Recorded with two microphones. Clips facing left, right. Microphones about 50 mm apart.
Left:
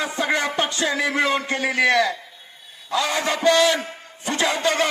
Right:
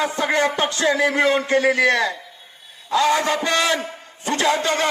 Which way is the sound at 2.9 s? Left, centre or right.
Right.